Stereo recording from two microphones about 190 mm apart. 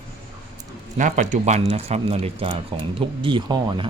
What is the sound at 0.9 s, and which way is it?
Speech, 40° right (ahead or behind).